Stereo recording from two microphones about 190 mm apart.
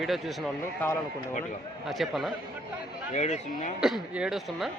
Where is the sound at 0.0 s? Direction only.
Centre (ahead or behind).